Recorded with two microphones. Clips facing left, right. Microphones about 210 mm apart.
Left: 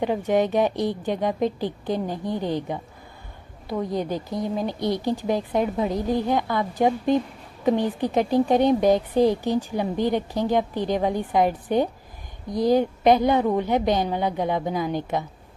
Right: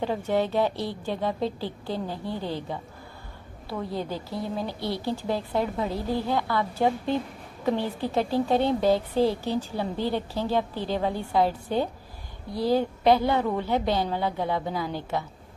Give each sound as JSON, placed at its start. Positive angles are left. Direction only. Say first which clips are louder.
{"t": 0.0, "sound": "a woman's voice", "louder": "left 4 dB", "side_deg": 15}